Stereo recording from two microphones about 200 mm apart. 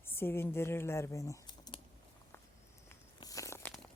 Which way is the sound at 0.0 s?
10° left (ahead or behind).